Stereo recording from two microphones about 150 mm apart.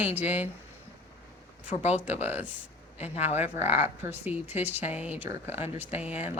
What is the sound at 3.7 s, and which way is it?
Speech, 15° right (ahead or behind).